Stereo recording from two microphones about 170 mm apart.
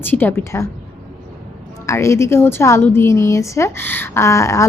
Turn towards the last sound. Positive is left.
turn(degrees=15)  # may be behind; listen again after turning